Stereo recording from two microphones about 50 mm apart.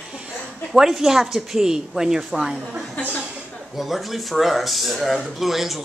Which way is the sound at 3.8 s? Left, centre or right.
Centre.